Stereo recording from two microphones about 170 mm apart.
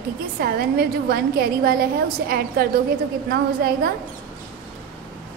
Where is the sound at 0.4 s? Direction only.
60° right (ahead or behind).